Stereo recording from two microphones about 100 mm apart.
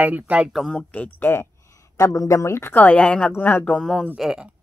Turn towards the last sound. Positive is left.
turn(degrees=-5)  # may be behind; listen again after turning